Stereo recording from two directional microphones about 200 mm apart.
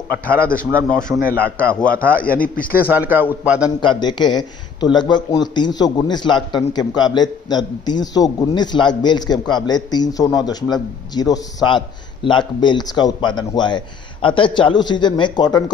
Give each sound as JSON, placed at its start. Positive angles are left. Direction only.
{"t": 0.8, "sound": "a man's voice", "side_deg": 5}
{"t": 2.3, "sound": "a man's voice", "side_deg": 45}
{"t": 2.9, "sound": "a man's voice", "side_deg": -10}
{"t": 3.8, "sound": "a man's voice", "side_deg": 25}